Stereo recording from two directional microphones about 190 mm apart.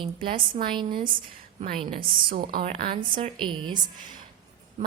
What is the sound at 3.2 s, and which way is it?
Speech, 30° right (ahead or behind).